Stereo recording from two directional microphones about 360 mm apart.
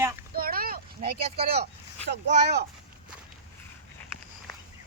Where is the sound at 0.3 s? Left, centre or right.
Right.